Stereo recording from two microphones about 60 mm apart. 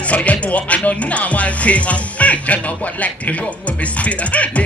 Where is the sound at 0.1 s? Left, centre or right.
Left.